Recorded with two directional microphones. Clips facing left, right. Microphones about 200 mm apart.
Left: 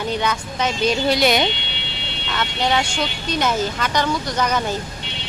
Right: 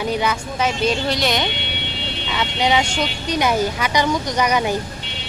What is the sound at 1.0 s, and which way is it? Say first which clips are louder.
Speech: left 3 dB; 10° left (ahead or behind).